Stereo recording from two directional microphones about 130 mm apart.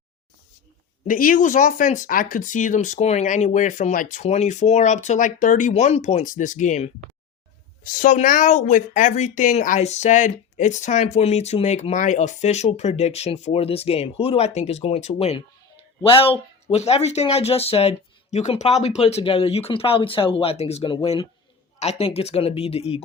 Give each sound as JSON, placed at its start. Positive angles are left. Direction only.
{"t": 1.0, "sound": "speech", "side_deg": 90}
{"t": 7.9, "sound": "speech", "side_deg": 80}
{"t": 16.0, "sound": "speech", "side_deg": 45}
{"t": 16.7, "sound": "speech", "side_deg": 55}